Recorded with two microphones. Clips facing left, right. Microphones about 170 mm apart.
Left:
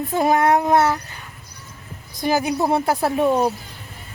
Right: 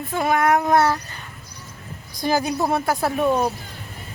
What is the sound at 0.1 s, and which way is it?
Speech, 35° left (ahead or behind).